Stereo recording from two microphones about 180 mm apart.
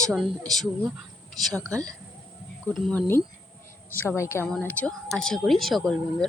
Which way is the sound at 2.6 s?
5° left (ahead or behind).